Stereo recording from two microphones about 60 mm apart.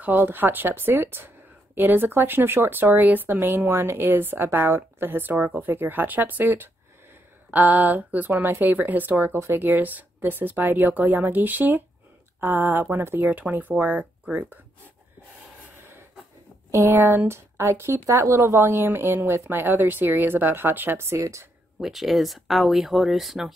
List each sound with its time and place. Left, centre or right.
0.0 s speech: right
16.7 s speech: right
21.2 s speech: right
21.7 s speech: centre